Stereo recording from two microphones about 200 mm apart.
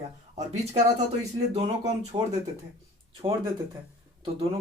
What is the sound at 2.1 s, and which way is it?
Speech, 25° right (ahead or behind).